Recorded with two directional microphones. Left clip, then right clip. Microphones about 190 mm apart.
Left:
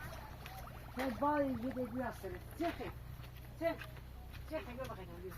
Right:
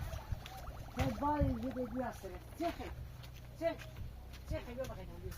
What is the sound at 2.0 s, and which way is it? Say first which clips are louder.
Speech: even; 75° right (ahead or behind).